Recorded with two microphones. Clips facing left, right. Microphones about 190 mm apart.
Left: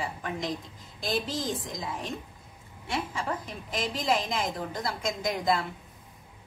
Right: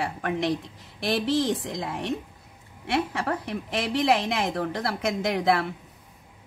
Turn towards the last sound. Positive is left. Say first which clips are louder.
# right 4 dB
turn(degrees=-70)  # may be behind; listen again after turning